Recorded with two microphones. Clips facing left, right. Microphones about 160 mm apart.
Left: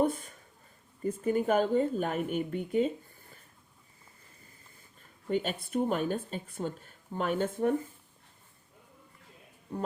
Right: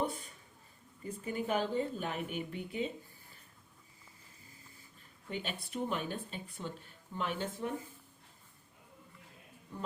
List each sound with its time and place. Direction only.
0.0 s a sound: 50° left (ahead or behind)
1.0 s speech: 45° left (ahead or behind)
5.3 s speech: 45° left (ahead or behind)